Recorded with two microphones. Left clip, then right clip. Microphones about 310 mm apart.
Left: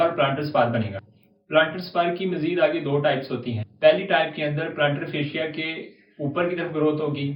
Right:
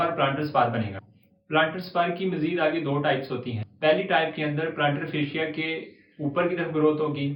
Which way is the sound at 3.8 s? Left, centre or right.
Centre.